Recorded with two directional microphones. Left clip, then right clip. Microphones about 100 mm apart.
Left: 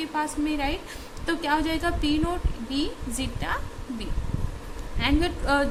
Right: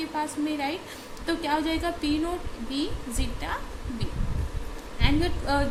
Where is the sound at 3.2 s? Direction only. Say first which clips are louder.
Left 3 dB; 50° left (ahead or behind).